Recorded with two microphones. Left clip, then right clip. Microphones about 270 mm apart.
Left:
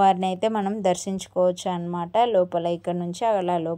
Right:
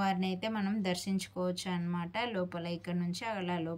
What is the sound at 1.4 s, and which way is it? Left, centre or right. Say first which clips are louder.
A woman's voice: left 16 dB; left.